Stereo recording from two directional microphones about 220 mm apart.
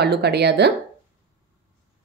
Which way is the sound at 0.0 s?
50° right (ahead or behind).